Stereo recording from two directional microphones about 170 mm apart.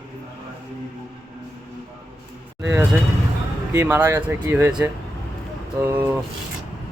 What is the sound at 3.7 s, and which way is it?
A man's voice, 10° right (ahead or behind).